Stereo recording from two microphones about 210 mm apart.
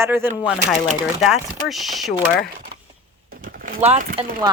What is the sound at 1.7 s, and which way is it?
Speech, centre (ahead or behind).